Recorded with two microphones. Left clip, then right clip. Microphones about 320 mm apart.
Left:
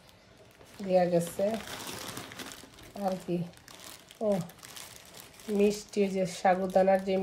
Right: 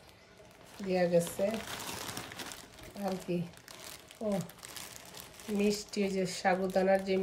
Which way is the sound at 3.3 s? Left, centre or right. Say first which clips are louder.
Left 2 dB; left.